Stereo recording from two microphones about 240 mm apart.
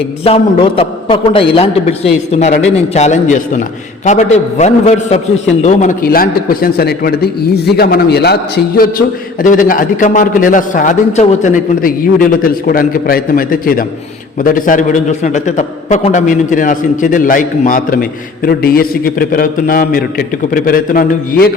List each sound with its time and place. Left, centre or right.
0.3 s a man's voice: left